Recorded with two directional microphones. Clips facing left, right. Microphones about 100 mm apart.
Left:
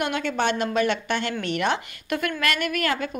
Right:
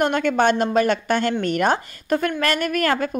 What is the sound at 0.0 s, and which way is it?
A woman's voice, 50° right (ahead or behind).